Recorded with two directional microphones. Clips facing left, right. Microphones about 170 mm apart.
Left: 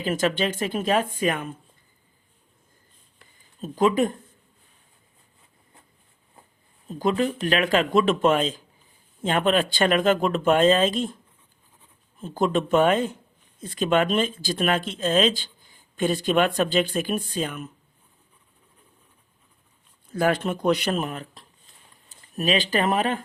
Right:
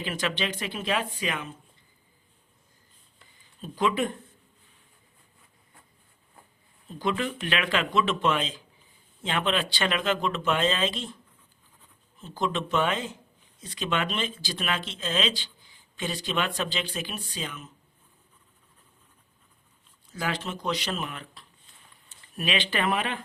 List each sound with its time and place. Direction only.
0.0 s speech: 45° left (ahead or behind)
3.6 s speech: 45° left (ahead or behind)
6.8 s speech: 40° left (ahead or behind)
12.2 s speech: 50° left (ahead or behind)
20.1 s speech: 50° left (ahead or behind)